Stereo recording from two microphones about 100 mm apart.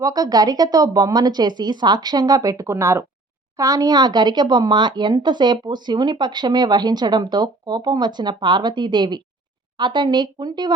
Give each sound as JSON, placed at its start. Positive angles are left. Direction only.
{"t": 0.0, "sound": "a woman's voice", "side_deg": -40}